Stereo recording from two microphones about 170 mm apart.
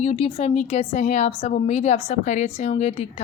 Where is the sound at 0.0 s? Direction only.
40° left (ahead or behind).